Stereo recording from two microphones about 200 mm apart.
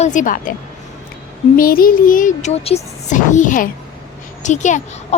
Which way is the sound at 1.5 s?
45° left (ahead or behind).